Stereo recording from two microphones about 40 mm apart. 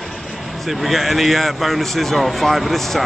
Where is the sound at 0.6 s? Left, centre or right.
Centre.